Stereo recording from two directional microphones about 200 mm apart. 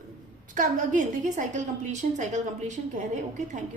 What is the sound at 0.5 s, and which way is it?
A woman's voice, 40° right (ahead or behind).